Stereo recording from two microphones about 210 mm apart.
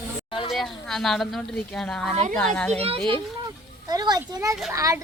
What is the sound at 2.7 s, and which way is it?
A child's voice, 30° right (ahead or behind).